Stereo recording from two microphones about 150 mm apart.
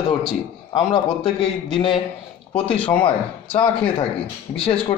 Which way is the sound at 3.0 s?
35° left (ahead or behind).